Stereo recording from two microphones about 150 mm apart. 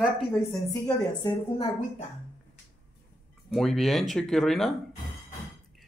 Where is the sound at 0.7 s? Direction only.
25° left (ahead or behind).